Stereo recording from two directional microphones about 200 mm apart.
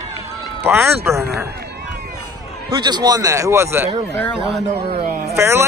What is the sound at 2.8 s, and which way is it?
Speech, 20° right (ahead or behind).